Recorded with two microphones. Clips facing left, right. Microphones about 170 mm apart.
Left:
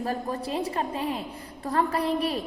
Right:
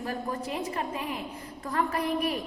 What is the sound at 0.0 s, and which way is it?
A woman's voice, 35° left (ahead or behind).